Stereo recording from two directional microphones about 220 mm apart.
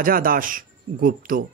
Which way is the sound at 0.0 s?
40° right (ahead or behind).